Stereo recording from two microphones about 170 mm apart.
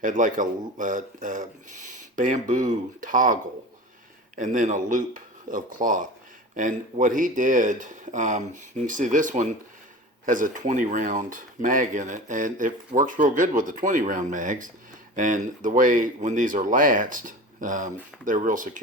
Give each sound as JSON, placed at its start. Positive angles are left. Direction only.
{"t": 0.0, "sound": "speech", "side_deg": -50}
{"t": 4.4, "sound": "speech", "side_deg": -50}